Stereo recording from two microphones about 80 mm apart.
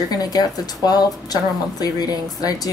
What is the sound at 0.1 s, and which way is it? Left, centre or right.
Speech, left.